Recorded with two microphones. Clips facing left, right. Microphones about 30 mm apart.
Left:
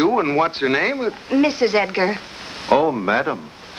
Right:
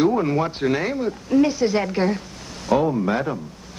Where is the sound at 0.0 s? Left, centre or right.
Left.